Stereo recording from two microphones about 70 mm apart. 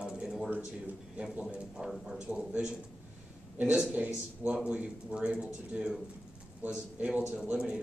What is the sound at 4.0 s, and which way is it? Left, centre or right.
Speech, centre.